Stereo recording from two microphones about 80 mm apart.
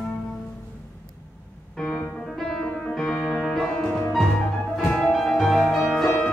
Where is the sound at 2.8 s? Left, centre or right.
Centre.